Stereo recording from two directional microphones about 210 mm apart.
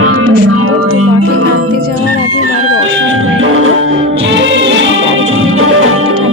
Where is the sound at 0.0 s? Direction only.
85° right.